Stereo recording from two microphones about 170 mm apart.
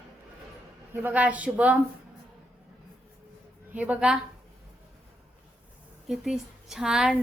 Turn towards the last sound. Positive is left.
turn(degrees=-5)  # may be behind; listen again after turning